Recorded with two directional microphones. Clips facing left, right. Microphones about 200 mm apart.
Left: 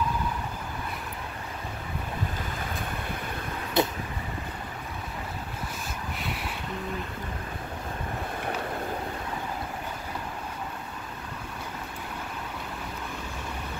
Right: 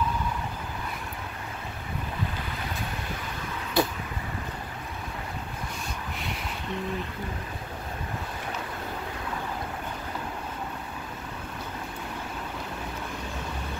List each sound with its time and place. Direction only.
3.8 s vehicle: 20° left (ahead or behind)